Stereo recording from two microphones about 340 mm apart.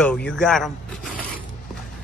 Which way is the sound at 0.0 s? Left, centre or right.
Centre.